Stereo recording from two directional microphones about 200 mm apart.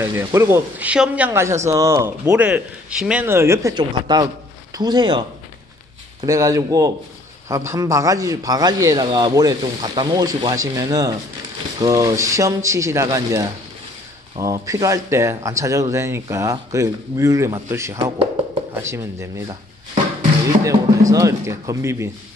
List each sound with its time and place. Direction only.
0.0 s speech: 15° right (ahead or behind)
6.2 s speech: 15° right (ahead or behind)
20.6 s speech: 15° right (ahead or behind)